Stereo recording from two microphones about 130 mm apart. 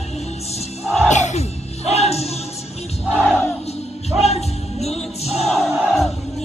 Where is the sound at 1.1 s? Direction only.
60° left (ahead or behind).